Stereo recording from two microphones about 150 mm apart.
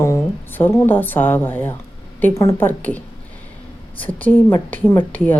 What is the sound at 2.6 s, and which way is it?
Speech, 10° left (ahead or behind).